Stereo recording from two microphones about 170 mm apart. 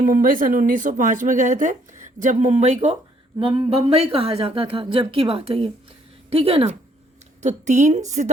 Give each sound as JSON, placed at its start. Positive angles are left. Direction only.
{"t": 0.1, "sound": "speech", "side_deg": -55}
{"t": 3.3, "sound": "a woman's voice", "side_deg": -30}
{"t": 7.4, "sound": "speech", "side_deg": -45}